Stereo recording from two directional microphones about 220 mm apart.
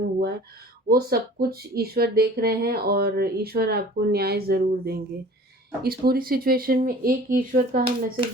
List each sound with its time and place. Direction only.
0.9 s speech: 45° right (ahead or behind)
7.9 s speech: 25° right (ahead or behind)